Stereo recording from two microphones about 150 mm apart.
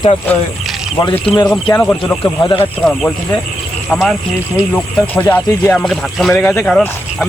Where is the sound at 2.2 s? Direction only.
30° left (ahead or behind).